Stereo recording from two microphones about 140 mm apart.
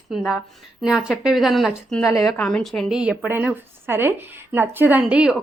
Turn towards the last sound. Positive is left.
turn(degrees=-10)  # may be behind; listen again after turning